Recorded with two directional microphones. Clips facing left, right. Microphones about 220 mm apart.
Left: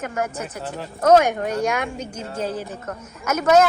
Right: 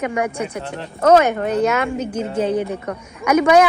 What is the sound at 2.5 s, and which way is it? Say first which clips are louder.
Speech: right 9 dB; 55° right (ahead or behind).